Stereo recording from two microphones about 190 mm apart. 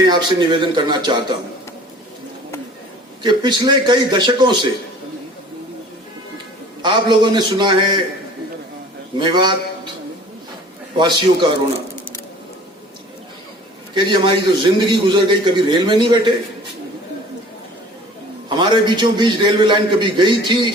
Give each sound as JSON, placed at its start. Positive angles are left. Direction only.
{"t": 0.0, "sound": "a man's voice", "side_deg": -25}
{"t": 3.2, "sound": "a man's voice", "side_deg": -25}
{"t": 6.8, "sound": "a man's voice", "side_deg": -25}
{"t": 9.1, "sound": "a man's voice", "side_deg": -25}
{"t": 10.9, "sound": "a man's voice", "side_deg": -25}
{"t": 13.9, "sound": "a man's voice", "side_deg": -25}
{"t": 18.4, "sound": "a man's voice", "side_deg": -25}